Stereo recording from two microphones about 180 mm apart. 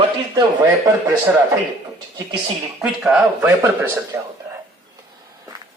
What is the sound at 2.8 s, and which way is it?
Speech, 5° right (ahead or behind).